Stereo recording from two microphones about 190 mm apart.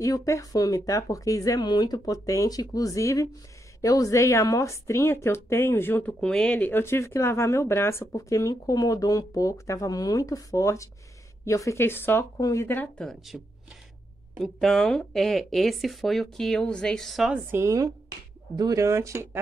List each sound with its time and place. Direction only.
0.0 s speech: 15° left (ahead or behind); by 19.4 s 15° right (ahead or behind)